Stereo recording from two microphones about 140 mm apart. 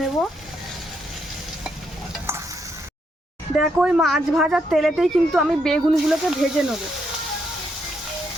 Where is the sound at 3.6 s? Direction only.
5° right (ahead or behind).